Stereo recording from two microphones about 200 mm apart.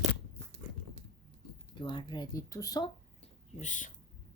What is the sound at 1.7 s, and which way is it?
Speech, 25° left (ahead or behind).